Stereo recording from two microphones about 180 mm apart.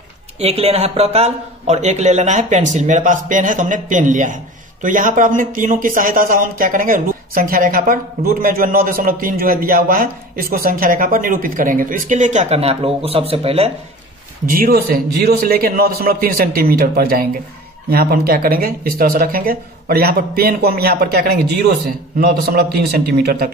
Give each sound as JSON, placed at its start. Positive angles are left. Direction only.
{"t": 0.4, "sound": "a man's voice", "side_deg": -35}
{"t": 14.5, "sound": "speech", "side_deg": -55}